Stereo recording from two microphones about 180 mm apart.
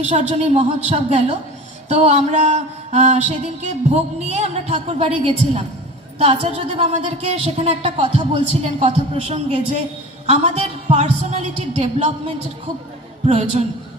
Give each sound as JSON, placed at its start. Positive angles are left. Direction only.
{"t": 0.0, "sound": "a woman's voice", "side_deg": -35}